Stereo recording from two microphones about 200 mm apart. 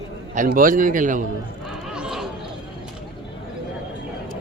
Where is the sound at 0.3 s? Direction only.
45° right (ahead or behind).